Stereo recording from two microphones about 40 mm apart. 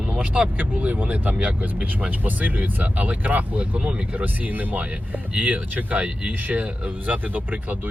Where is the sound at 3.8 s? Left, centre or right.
Right.